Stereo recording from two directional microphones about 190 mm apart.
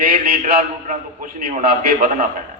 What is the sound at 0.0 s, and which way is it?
A man's voice, 50° right (ahead or behind).